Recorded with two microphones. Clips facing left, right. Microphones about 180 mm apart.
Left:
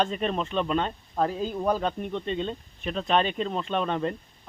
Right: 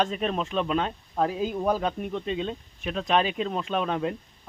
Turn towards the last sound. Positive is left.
turn(degrees=-5)  # may be behind; listen again after turning